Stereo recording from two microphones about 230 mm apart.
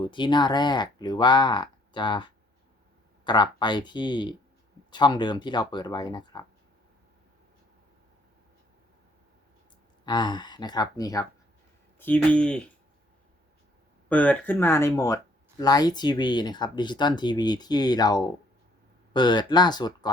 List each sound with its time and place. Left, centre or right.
0.0 s speech: left
10.1 s speech: centre
14.1 s speech: centre